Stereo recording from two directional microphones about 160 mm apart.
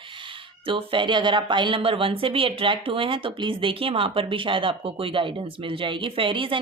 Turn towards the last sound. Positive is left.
turn(degrees=-30)  # may be behind; listen again after turning